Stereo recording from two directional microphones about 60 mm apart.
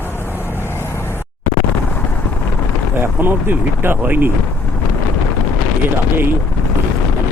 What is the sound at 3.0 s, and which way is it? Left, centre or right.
Speech, right.